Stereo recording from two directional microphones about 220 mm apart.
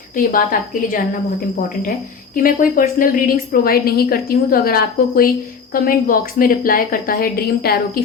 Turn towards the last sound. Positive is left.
turn(degrees=45)  # may be behind; listen again after turning